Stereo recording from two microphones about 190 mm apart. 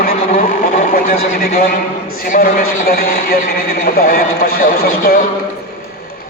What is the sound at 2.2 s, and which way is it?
A man's voice, 45° left (ahead or behind).